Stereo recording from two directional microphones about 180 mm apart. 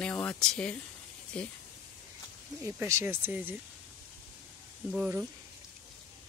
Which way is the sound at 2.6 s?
15° right (ahead or behind).